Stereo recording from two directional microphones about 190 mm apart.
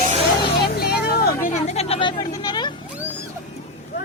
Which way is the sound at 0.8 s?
55° left (ahead or behind).